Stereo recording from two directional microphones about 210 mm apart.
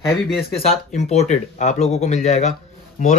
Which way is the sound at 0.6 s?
30° left (ahead or behind).